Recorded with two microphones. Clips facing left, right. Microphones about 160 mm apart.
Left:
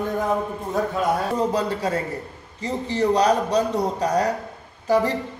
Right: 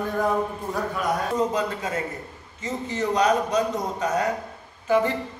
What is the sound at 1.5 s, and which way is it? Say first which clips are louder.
A man's voice: left 4 dB; 35° left (ahead or behind).